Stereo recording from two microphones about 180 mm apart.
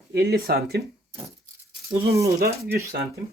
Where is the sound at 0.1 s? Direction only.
60° right (ahead or behind).